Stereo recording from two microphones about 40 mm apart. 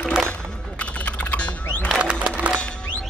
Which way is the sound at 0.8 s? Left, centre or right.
Left.